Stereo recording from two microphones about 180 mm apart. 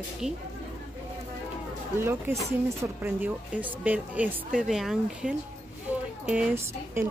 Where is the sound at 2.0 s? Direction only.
15° right (ahead or behind).